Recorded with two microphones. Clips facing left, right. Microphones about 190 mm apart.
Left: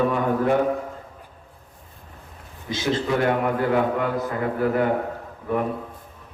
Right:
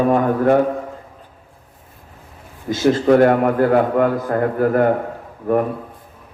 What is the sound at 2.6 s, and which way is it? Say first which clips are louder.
A man's voice: right 9 dB; 45° right (ahead or behind).